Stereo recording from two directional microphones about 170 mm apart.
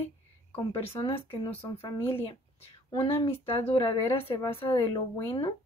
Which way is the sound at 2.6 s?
30° left (ahead or behind).